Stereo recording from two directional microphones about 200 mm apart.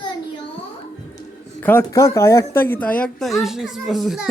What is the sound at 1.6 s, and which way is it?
Speech, 10° left (ahead or behind).